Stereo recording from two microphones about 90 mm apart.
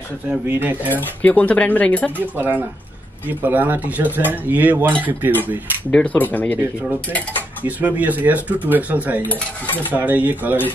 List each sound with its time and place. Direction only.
0.6 s speech: 20° right (ahead or behind)
1.2 s speech: 15° left (ahead or behind)
2.3 s speech: 20° right (ahead or behind)
5.9 s speech: 15° left (ahead or behind)
7.6 s speech: 20° right (ahead or behind)
9.3 s stir: 20° left (ahead or behind)
9.9 s speech: 15° right (ahead or behind)